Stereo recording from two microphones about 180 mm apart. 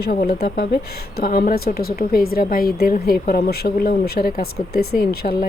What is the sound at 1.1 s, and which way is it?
A woman's voice, 55° left (ahead or behind).